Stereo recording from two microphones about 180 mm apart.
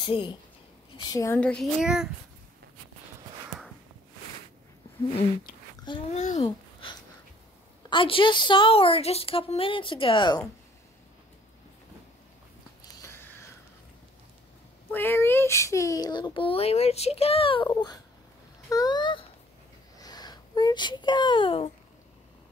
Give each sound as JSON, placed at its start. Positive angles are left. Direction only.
{"t": 0.0, "sound": "a woman's voice", "side_deg": 25}
{"t": 1.4, "sound": "a child's voice", "side_deg": 5}
{"t": 6.1, "sound": "speech", "side_deg": 40}
{"t": 7.9, "sound": "speech", "side_deg": 30}
{"t": 13.0, "sound": "a sound", "side_deg": 10}
{"t": 14.9, "sound": "speech", "side_deg": 10}
{"t": 18.7, "sound": "a sound", "side_deg": 20}
{"t": 20.0, "sound": "speech", "side_deg": 20}